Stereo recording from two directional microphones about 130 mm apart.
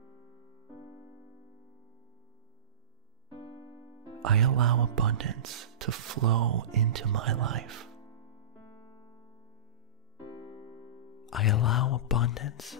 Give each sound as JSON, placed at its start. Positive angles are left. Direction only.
{"t": 4.2, "sound": "speech", "side_deg": 0}
{"t": 10.4, "sound": "electric piano", "side_deg": 45}
{"t": 11.2, "sound": "speech", "side_deg": 0}